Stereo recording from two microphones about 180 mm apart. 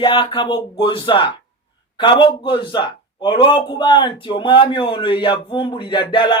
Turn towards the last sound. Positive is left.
turn(degrees=30)  # may be behind; listen again after turning